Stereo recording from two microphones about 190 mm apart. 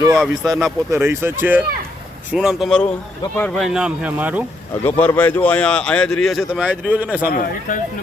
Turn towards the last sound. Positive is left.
turn(degrees=45)  # may be behind; listen again after turning